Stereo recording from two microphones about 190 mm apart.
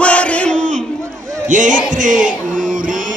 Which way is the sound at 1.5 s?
40° right (ahead or behind).